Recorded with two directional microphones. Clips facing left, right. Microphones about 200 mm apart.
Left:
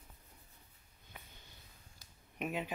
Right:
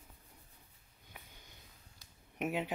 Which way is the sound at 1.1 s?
10° right (ahead or behind).